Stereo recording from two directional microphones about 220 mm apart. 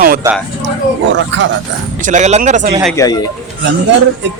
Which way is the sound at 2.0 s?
35° right (ahead or behind).